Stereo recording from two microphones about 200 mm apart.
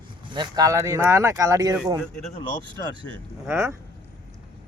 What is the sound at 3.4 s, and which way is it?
Speech, 10° right (ahead or behind).